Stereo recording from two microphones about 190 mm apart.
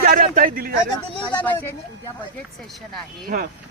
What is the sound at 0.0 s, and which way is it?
Speech, 45° right (ahead or behind).